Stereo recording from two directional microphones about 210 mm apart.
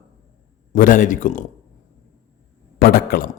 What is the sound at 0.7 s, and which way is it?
Speech, 40° left (ahead or behind).